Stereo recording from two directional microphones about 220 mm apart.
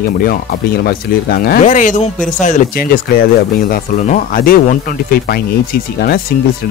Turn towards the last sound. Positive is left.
turn(degrees=40)  # may be behind; listen again after turning